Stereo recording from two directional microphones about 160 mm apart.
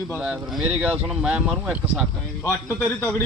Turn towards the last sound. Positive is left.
turn(degrees=15)  # may be behind; listen again after turning